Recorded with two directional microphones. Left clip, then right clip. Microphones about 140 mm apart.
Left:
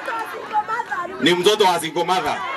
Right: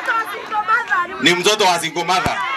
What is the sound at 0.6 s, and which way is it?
Chatter, 35° right (ahead or behind).